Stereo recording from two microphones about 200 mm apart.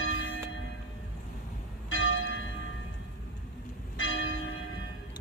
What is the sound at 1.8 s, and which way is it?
Church bell, 80° left.